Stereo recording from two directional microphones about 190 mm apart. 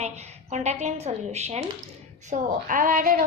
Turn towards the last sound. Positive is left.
turn(degrees=-45)  # may be behind; listen again after turning